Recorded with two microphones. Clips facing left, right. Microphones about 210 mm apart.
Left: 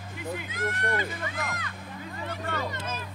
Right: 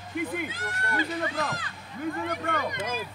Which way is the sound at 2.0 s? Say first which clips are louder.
Right 10 dB; 55° right (ahead or behind).